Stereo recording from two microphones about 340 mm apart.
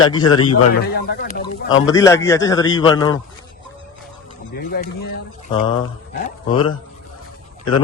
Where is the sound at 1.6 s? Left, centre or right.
Left.